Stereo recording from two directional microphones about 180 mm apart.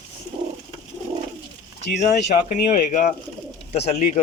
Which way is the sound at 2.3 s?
45° left (ahead or behind).